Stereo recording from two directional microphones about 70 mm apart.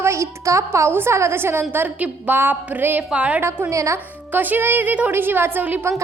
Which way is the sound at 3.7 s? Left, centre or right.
Right.